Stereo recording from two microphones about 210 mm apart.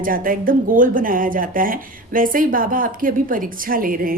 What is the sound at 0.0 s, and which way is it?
A woman's voice, 40° right (ahead or behind).